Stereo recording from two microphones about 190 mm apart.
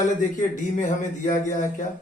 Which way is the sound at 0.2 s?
40° left (ahead or behind).